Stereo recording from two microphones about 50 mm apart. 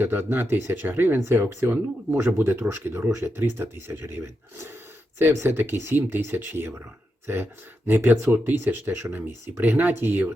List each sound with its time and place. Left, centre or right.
0.0 s speech: right
1.2 s speech: right
3.1 s speech: right
7.3 s speech: right
8.1 s speech: right
9.1 s speech: right